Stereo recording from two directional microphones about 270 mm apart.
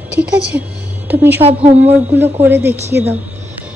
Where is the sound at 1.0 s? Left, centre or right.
Centre.